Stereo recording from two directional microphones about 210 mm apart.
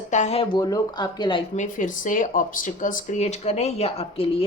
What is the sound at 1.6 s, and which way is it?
Speech, 40° left (ahead or behind).